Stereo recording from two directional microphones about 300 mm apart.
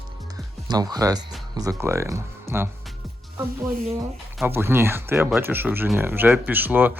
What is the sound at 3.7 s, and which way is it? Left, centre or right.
Speech, right.